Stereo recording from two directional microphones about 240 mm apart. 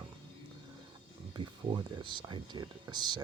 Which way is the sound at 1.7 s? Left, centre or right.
Centre.